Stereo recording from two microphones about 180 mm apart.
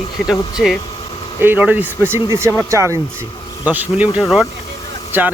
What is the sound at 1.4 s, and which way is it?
Speech, 10° right (ahead or behind).